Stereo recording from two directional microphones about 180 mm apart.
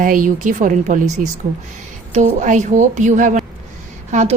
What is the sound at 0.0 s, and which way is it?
A woman's voice, 45° right (ahead or behind).